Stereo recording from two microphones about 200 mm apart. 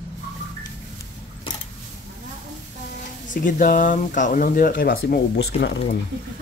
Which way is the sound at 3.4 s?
40° left (ahead or behind).